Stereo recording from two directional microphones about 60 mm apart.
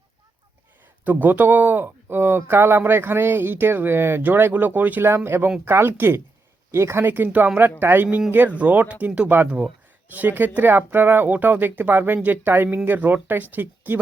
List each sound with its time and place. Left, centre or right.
1.0 s speech: right
5.0 s speech: right
7.0 s speech: right
8.4 s speech: right